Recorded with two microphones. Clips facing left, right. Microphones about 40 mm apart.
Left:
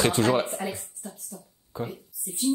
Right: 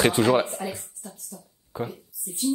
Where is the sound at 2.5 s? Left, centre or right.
Centre.